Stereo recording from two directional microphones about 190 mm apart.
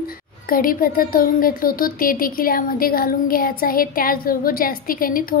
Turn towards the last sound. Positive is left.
turn(degrees=50)  # may be behind; listen again after turning